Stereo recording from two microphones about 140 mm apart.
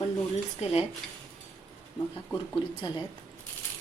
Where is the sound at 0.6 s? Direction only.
45° left (ahead or behind).